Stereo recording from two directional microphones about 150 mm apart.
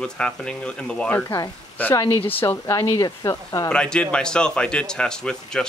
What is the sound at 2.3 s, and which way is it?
Speech, 15° left (ahead or behind).